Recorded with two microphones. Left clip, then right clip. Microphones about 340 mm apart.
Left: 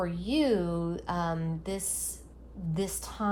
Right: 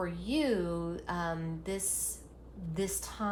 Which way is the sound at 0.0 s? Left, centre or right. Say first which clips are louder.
Left 4 dB; left.